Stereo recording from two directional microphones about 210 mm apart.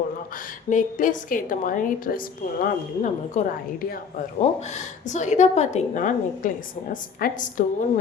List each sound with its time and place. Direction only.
0.7 s a woman's voice: 35° left (ahead or behind)